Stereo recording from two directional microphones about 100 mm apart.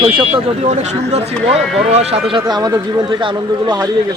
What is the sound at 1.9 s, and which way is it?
Speech, 90° right.